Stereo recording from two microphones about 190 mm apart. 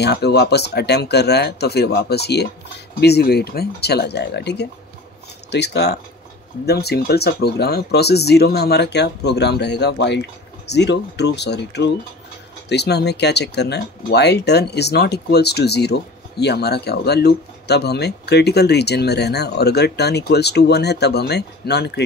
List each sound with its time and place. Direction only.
0.0 s speech: 60° left (ahead or behind)